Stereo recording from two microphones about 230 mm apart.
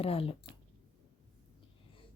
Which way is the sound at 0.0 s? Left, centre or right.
Left.